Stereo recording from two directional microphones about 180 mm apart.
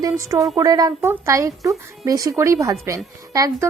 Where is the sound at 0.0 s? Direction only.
20° right (ahead or behind).